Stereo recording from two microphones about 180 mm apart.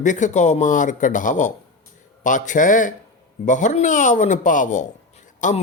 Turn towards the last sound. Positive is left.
turn(degrees=45)  # may be behind; listen again after turning